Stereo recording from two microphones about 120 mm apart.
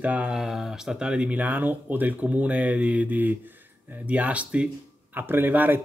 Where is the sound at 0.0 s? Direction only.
10° right (ahead or behind).